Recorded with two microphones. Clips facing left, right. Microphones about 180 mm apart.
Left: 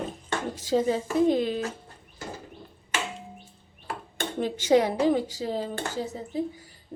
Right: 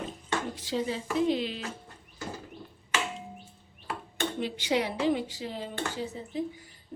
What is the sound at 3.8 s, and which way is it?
Speech, 45° left (ahead or behind).